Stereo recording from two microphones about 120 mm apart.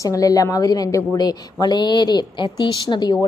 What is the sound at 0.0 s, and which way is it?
A woman's voice, 30° left (ahead or behind).